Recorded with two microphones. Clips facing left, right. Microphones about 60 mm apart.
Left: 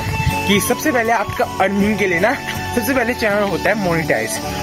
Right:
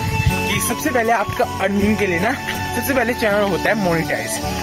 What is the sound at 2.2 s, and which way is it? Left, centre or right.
Music, left.